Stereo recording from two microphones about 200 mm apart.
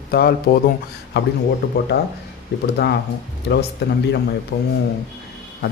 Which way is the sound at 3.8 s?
55° left (ahead or behind).